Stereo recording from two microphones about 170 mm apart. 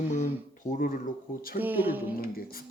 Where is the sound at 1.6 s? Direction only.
10° right (ahead or behind).